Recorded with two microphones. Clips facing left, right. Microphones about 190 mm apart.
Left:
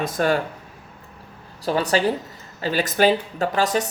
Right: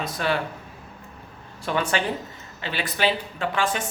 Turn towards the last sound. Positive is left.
turn(degrees=40)  # may be behind; listen again after turning